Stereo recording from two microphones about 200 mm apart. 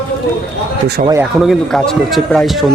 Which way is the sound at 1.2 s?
Centre (ahead or behind).